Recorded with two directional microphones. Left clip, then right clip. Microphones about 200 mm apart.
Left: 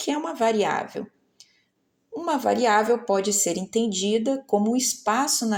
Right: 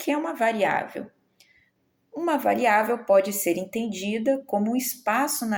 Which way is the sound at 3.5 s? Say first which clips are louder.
Left 3 dB; 45° left (ahead or behind).